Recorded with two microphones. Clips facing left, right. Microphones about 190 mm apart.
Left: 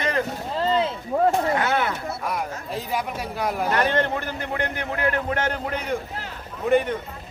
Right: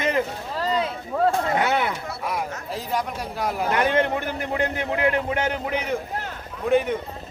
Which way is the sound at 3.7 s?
15° right (ahead or behind).